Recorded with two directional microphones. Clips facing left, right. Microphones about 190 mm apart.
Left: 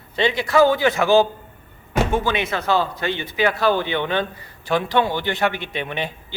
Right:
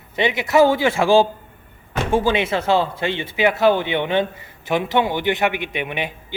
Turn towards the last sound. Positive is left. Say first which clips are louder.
# right 1 dB
turn(degrees=-15)  # may be behind; listen again after turning